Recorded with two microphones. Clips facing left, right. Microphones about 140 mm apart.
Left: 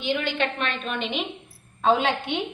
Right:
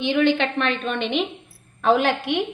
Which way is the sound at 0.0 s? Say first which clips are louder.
Right 6 dB; 65° right (ahead or behind).